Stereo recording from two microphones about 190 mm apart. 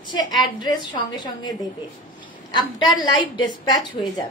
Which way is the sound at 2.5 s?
20° left (ahead or behind).